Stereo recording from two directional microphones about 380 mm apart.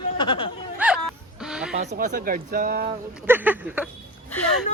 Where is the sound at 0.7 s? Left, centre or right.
Centre.